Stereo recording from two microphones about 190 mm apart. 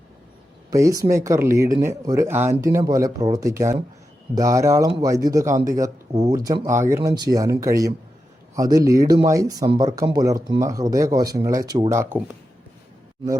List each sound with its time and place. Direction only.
0.7 s speech: 15° right (ahead or behind)